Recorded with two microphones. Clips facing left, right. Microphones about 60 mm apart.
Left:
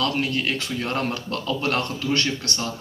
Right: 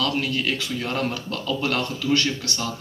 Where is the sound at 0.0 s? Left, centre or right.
Left.